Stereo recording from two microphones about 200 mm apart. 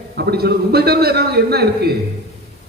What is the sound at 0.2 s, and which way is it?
A man's voice, 55° right (ahead or behind).